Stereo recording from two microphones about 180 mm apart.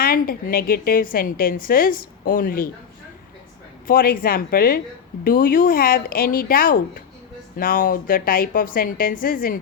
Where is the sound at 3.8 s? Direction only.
55° left (ahead or behind).